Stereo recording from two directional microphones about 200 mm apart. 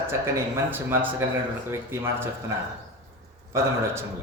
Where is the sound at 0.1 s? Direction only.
10° right (ahead or behind).